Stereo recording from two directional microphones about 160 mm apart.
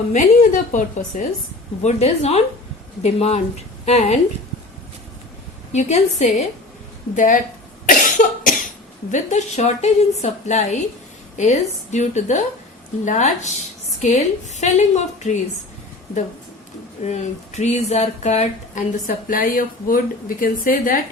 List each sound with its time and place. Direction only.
0.1 s a woman's voice: 50° left (ahead or behind)
5.7 s a woman's voice: 45° left (ahead or behind)
7.9 s cough: 55° left (ahead or behind)
9.1 s speech: 45° left (ahead or behind)
17.0 s speech: 45° left (ahead or behind); by 21.0 s 60° left (ahead or behind)